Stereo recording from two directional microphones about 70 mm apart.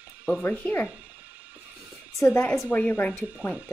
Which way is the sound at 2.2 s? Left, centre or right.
Centre.